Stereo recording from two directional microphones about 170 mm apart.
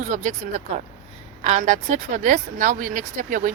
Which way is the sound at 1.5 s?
45° right (ahead or behind).